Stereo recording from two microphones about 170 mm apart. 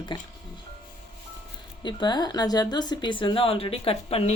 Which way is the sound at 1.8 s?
25° left (ahead or behind).